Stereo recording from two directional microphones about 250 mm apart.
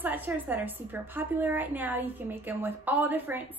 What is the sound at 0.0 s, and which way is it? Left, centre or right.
A woman's voice, centre.